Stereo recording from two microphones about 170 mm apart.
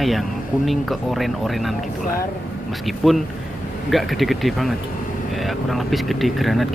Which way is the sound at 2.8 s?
Centre (ahead or behind).